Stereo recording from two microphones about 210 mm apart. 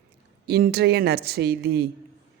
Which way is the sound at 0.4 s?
50° right (ahead or behind).